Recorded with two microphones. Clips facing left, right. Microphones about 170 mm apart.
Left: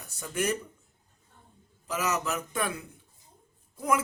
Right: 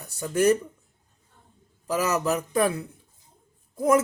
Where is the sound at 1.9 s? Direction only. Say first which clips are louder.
Right 6 dB; 35° right (ahead or behind).